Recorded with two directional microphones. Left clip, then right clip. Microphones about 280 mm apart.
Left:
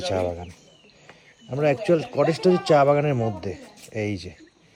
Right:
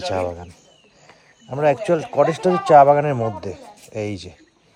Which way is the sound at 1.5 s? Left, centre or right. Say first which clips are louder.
Right 3 dB; centre.